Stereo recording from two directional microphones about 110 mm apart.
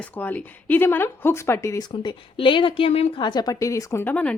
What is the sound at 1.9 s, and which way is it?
Speech, 50° left (ahead or behind).